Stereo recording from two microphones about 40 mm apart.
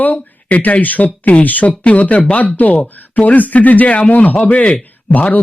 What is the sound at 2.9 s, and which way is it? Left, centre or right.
Speech, left.